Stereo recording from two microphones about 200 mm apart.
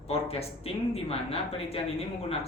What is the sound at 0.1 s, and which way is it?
Speech, 30° left (ahead or behind).